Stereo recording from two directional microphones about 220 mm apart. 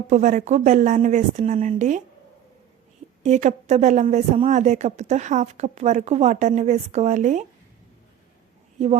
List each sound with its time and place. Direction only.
0.1 s speech: 35° right (ahead or behind)
3.2 s speech: 30° right (ahead or behind)